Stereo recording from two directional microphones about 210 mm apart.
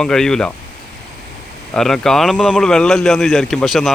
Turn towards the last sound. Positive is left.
turn(degrees=0)  # may be behind; listen again after turning